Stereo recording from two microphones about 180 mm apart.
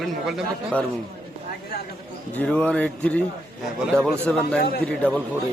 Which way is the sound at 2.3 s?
5° left (ahead or behind).